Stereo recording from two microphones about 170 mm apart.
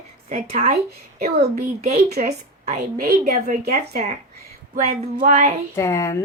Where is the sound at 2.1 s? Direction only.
50° right (ahead or behind).